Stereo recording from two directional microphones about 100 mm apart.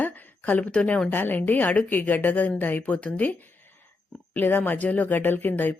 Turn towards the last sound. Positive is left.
turn(degrees=20)  # may be behind; listen again after turning